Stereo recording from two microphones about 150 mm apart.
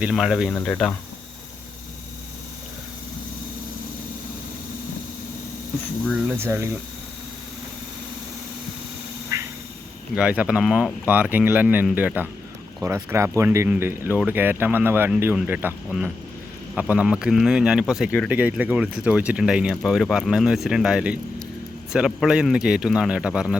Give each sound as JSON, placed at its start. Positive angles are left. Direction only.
{"t": 0.0, "sound": "speech", "side_deg": -5}
{"t": 0.5, "sound": "speech", "side_deg": 10}
{"t": 6.2, "sound": "speech", "side_deg": -15}
{"t": 9.3, "sound": "quack", "side_deg": -20}
{"t": 10.2, "sound": "speech", "side_deg": -5}